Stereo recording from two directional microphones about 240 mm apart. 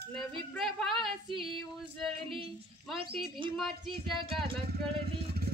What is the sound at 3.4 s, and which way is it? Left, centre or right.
Speech, right.